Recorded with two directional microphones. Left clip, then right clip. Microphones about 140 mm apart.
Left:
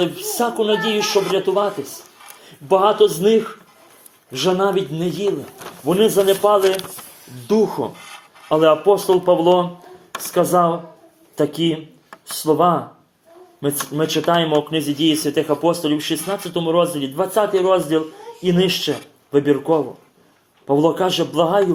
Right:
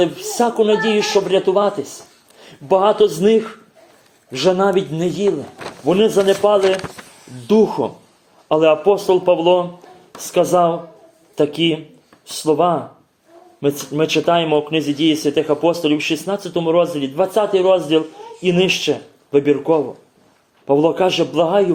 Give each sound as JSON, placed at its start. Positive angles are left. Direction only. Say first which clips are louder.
{"t": 0.0, "sound": "speech", "louder": "right 3 dB", "side_deg": 0}